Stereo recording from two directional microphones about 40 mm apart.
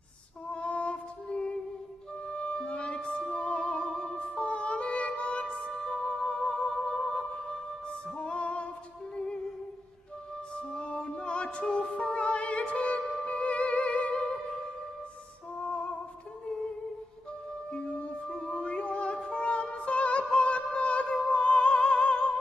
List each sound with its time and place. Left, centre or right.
0.5 s music: left
10.5 s music: left
15.6 s music: left
17.6 s music: left
17.9 s music: left
18.3 s music: left